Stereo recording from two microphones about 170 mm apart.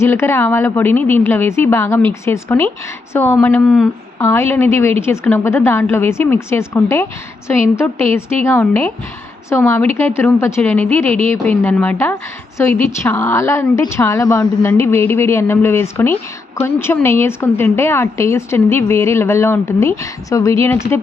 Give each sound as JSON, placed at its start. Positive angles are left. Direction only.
{"t": 0.0, "sound": "a woman's voice", "side_deg": 15}
{"t": 4.2, "sound": "a woman's voice", "side_deg": 15}